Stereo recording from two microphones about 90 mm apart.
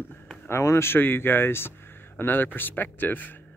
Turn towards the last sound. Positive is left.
turn(degrees=20)  # may be behind; listen again after turning